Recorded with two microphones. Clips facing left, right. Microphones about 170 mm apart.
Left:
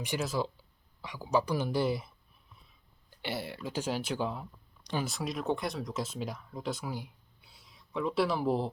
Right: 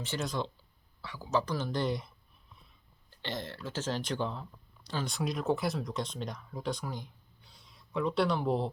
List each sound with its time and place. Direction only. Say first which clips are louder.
0.2 s speech: even; 5° left (ahead or behind)
4.8 s a sound: left 2 dB; 15° left (ahead or behind)
5.0 s speech: right 4 dB; centre (ahead or behind)